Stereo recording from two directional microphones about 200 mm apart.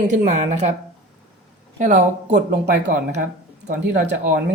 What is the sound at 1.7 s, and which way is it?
Speech, 35° right (ahead or behind).